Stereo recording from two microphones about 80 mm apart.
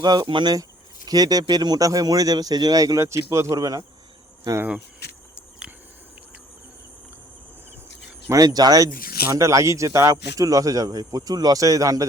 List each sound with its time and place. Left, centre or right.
0.0 s speech: right
1.0 s speech: right
8.3 s speech: right